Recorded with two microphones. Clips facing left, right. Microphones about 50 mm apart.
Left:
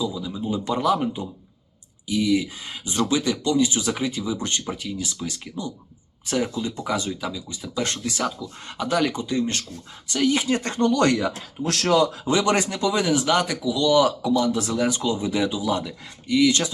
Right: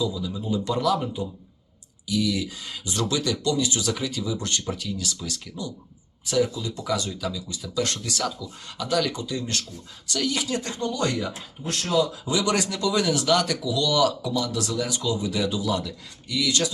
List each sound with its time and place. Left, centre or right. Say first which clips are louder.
0.0 s speech: left 1 dB; left
6.2 s speech: right 1 dB; left
12.2 s speech: left 3 dB; left
12.6 s speech: left 1 dB; left